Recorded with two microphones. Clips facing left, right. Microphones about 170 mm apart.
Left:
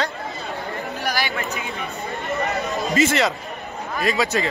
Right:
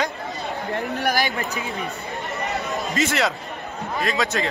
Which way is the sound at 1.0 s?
50° right (ahead or behind).